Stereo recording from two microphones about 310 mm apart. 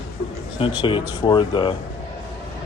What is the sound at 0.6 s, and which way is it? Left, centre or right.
Speech, centre.